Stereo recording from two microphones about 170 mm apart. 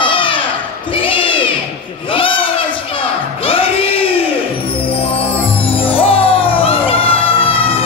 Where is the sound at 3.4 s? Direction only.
35° left (ahead or behind).